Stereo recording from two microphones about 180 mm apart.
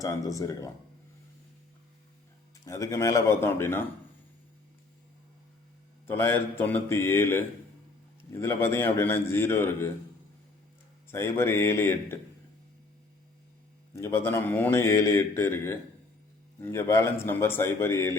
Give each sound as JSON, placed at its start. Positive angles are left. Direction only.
{"t": 0.0, "sound": "a man's voice", "side_deg": 20}
{"t": 2.6, "sound": "a man's voice", "side_deg": 15}
{"t": 6.1, "sound": "a man's voice", "side_deg": 15}
{"t": 11.1, "sound": "a man's voice", "side_deg": 15}
{"t": 13.9, "sound": "a man's voice", "side_deg": 15}